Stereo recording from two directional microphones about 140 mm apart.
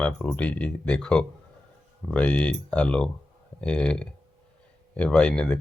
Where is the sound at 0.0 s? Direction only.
10° left (ahead or behind).